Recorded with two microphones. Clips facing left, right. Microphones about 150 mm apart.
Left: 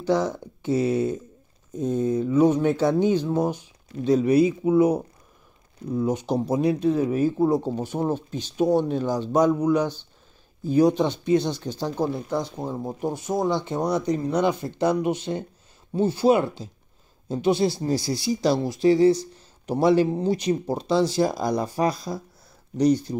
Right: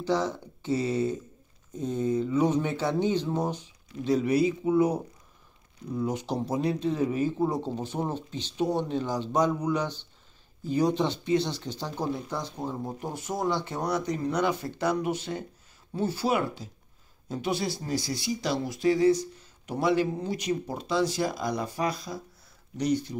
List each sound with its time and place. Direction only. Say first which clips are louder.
0.0 s speech: left 4 dB; 15° left (ahead or behind); by 23.1 s 35° left (ahead or behind)